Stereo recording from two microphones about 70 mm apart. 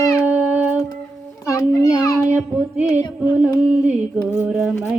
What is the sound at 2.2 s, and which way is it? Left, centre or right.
Music, right.